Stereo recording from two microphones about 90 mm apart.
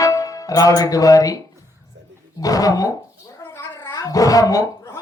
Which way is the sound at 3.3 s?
35° left (ahead or behind).